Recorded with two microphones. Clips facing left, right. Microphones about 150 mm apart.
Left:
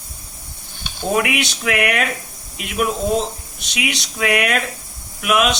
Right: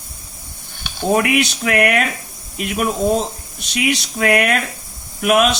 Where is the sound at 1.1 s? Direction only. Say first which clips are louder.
Right 3 dB; 45° right (ahead or behind).